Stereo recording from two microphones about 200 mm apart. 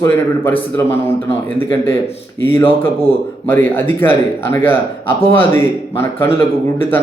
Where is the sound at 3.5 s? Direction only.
10° left (ahead or behind).